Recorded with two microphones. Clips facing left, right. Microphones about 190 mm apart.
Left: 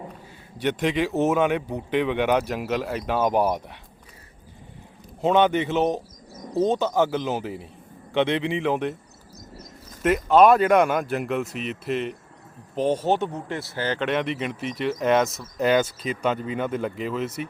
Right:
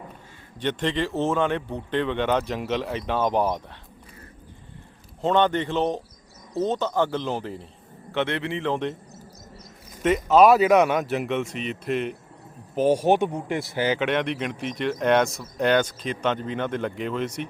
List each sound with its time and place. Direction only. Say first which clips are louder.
0.6 s speech: left 2 dB; 10° left (ahead or behind)
5.2 s speech: left 2 dB; 10° left (ahead or behind)
10.0 s speech: even; centre (ahead or behind)